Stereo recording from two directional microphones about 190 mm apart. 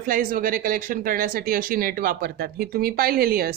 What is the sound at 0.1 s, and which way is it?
Speech, 50° right (ahead or behind).